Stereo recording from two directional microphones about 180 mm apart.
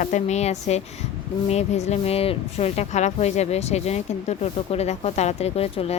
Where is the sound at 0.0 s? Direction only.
40° left (ahead or behind).